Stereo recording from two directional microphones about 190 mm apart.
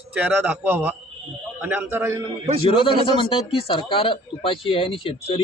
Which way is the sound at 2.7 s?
25° left (ahead or behind).